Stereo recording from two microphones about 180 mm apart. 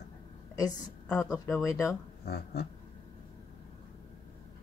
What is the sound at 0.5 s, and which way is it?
A woman's voice, 20° left (ahead or behind).